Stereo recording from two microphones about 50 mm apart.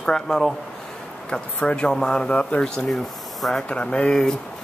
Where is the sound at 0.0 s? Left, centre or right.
Centre.